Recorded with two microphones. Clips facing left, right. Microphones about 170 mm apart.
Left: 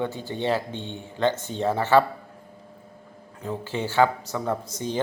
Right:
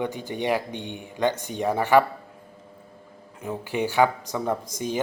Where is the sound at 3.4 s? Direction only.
15° right (ahead or behind).